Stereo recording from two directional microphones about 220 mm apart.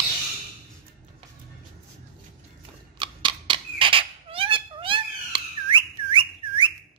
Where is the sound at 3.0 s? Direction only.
20° right (ahead or behind).